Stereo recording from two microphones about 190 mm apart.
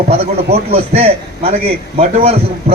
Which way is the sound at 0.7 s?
30° right (ahead or behind).